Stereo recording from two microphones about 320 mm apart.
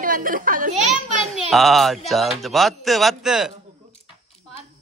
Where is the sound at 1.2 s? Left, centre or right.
Centre.